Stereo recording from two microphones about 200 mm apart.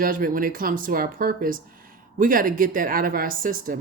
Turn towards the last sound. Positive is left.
turn(degrees=-45)  # may be behind; listen again after turning